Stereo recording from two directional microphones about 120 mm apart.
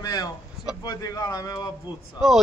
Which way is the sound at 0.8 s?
30° left (ahead or behind).